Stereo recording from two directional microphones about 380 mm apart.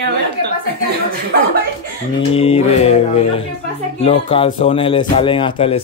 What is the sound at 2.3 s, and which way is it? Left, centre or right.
Speech, centre.